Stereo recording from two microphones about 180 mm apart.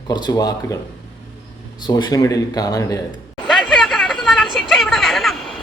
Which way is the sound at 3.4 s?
5° left (ahead or behind).